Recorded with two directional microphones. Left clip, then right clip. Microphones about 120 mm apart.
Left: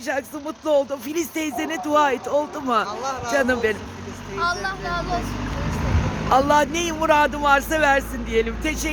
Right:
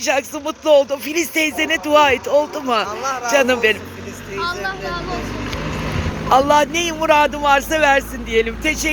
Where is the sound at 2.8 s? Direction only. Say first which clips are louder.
Right 5 dB; centre (ahead or behind).